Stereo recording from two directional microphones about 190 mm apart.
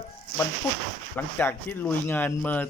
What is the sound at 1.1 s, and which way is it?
Speech, 10° left (ahead or behind).